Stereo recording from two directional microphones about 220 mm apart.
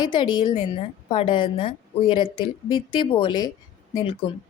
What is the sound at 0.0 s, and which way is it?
A woman's voice, 20° left (ahead or behind).